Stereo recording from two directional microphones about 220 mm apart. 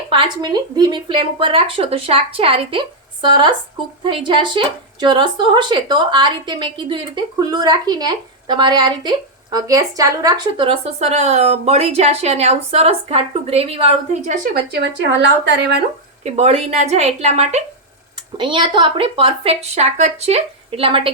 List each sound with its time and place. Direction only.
0.1 s a woman's voice: 20° right (ahead or behind)
14.7 s speech: 50° right (ahead or behind)
16.2 s a woman's voice: 30° right (ahead or behind)